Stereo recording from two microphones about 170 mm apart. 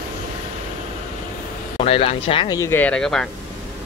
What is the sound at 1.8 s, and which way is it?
Speech, 35° left (ahead or behind).